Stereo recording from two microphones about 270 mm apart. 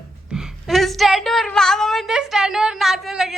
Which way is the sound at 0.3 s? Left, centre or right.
Centre.